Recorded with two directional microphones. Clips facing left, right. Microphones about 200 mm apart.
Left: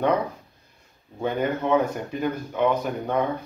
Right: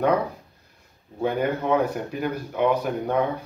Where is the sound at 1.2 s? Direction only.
10° right (ahead or behind).